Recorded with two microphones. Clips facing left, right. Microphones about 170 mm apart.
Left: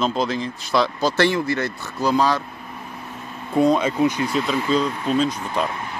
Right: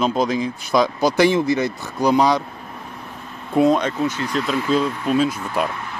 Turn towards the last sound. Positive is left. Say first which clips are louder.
# right 2 dB
turn(degrees=-5)  # may be behind; listen again after turning